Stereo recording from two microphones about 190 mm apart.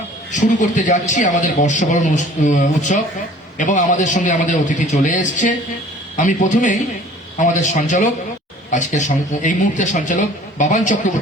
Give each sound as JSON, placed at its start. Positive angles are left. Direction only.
{"t": 0.3, "sound": "a man's voice", "side_deg": 40}